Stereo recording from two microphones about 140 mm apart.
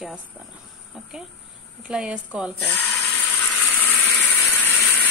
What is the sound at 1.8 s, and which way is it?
Speech, 5° right (ahead or behind).